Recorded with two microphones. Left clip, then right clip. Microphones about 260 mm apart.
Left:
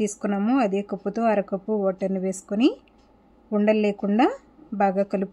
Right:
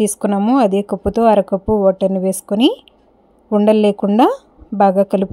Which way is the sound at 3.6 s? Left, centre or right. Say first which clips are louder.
Right 9 dB; right.